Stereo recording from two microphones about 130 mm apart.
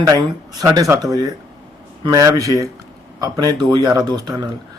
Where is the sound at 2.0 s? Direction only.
25° right (ahead or behind).